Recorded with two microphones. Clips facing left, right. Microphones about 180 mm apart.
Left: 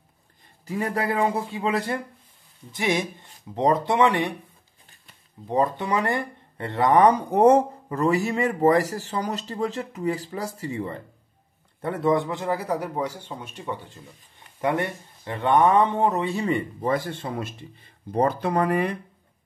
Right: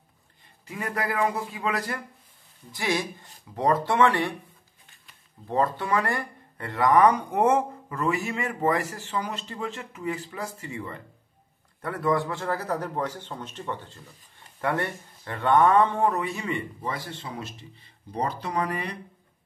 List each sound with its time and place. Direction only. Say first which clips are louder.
0.7 s speech: left 5 dB; 35° left (ahead or behind); by 4.3 s 20° left (ahead or behind)
5.5 s a man's voice: left 2 dB; 20° left (ahead or behind); by 18.9 s 50° left (ahead or behind)